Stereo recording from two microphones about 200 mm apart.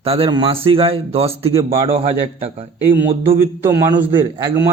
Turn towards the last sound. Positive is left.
turn(degrees=-20)  # may be behind; listen again after turning